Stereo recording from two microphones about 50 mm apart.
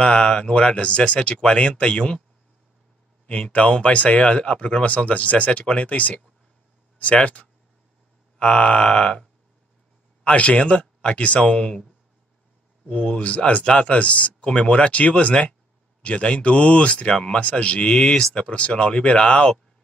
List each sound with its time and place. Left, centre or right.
0.0 s speech: centre
3.3 s speech: left
10.2 s speech: left
12.8 s speech: left